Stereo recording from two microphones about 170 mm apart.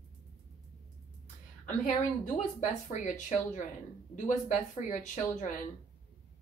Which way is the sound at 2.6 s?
45° left (ahead or behind).